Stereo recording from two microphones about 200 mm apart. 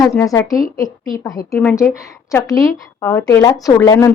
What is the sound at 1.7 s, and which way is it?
A woman's voice, 15° left (ahead or behind).